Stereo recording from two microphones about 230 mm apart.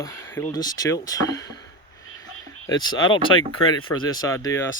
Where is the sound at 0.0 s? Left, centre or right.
Centre.